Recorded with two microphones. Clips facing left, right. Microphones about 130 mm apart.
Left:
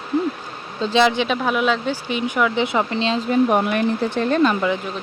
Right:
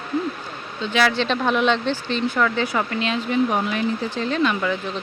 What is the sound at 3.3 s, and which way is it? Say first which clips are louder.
Speech: left 4 dB; 55° left (ahead or behind).